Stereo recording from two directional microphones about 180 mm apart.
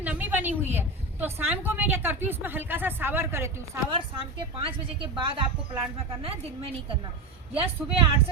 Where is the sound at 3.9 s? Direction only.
30° right (ahead or behind).